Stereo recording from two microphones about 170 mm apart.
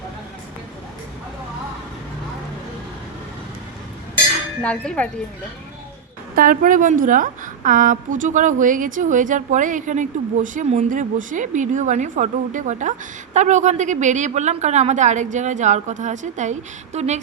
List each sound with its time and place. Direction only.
4.6 s chink: 5° left (ahead or behind)
6.3 s a woman's voice: 55° right (ahead or behind)